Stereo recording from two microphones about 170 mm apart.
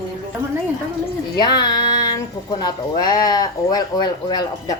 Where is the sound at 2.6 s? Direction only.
25° left (ahead or behind).